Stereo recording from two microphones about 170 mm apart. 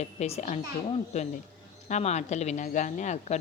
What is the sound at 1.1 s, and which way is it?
A woman's voice, 35° left (ahead or behind).